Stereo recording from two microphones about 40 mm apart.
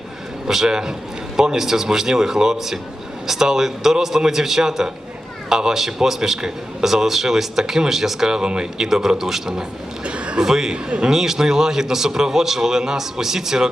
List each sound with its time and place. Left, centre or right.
0.4 s a man's voice: centre
8.3 s a man's voice: centre
10.1 s a sound: right
10.4 s a man's voice: centre